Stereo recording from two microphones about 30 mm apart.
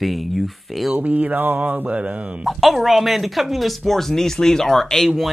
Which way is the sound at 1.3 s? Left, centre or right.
Right.